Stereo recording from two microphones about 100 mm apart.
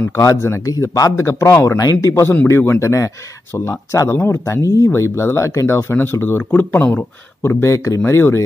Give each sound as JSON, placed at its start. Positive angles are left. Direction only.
{"t": 0.1, "sound": "speech", "side_deg": 30}